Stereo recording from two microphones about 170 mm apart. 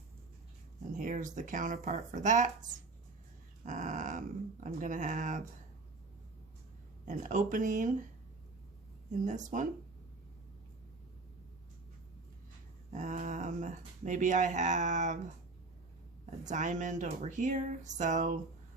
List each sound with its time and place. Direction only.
0.9 s speech: 50° right (ahead or behind)
3.7 s speech: 45° right (ahead or behind)
7.0 s speech: 50° right (ahead or behind)
9.2 s speech: 45° right (ahead or behind)
12.9 s speech: 45° right (ahead or behind)
16.2 s speech: 45° right (ahead or behind)